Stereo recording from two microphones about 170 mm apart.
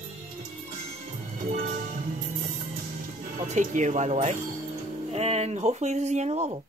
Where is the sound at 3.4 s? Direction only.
45° right (ahead or behind).